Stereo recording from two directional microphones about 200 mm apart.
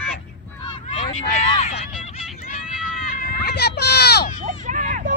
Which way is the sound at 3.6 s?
55° left (ahead or behind).